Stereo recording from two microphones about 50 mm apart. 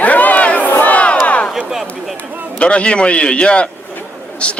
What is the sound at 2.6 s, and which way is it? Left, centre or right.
A man's voice, left.